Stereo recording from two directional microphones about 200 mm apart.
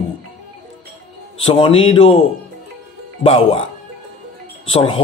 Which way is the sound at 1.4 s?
25° left (ahead or behind).